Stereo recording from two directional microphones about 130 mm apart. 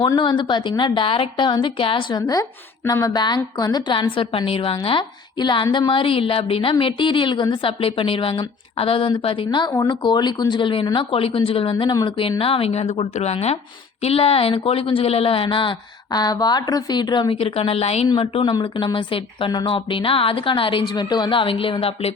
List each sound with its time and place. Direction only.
0.2 s speech: 35° left (ahead or behind)
2.2 s a woman's voice: 25° left (ahead or behind)
16.1 s a woman's voice: 30° left (ahead or behind)
18.5 s speech: 35° left (ahead or behind)